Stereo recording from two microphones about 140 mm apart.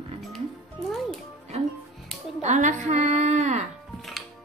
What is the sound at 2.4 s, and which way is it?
A woman's voice, 55° right (ahead or behind).